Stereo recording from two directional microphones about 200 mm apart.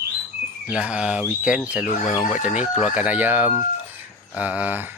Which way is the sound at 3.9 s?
5° right (ahead or behind).